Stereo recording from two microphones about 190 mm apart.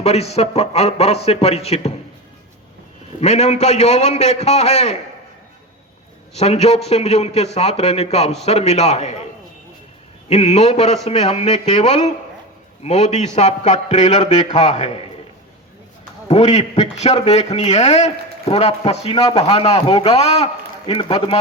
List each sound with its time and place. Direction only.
0.0 s a man's voice: 35° left (ahead or behind)
3.2 s a man's voice: 35° left (ahead or behind)
6.3 s a man's voice: 35° left (ahead or behind)
10.2 s a man's voice: 35° left (ahead or behind)
16.3 s a man's voice: 35° left (ahead or behind)